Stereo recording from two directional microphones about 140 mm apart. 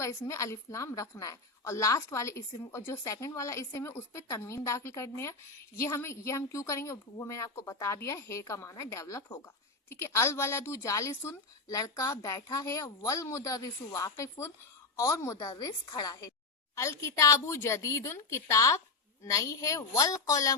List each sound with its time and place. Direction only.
0.0 s a woman's voice: 20° left (ahead or behind)